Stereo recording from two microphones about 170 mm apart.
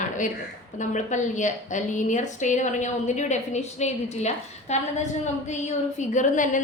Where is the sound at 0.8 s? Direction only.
45° left (ahead or behind).